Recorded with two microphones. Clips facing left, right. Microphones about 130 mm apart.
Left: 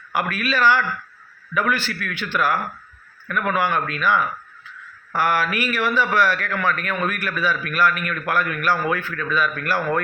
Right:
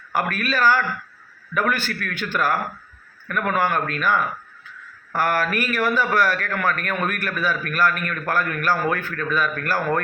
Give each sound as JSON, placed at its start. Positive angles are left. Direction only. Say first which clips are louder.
{"t": 0.1, "sound": "a man's voice", "louder": "even", "side_deg": -45}